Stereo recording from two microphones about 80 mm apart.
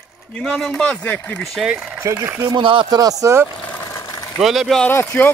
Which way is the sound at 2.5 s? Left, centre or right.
Right.